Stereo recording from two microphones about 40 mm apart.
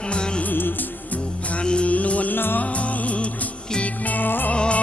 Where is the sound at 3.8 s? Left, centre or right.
Left.